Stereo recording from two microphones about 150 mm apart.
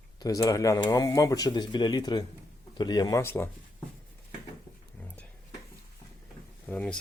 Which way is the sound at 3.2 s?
15° left (ahead or behind).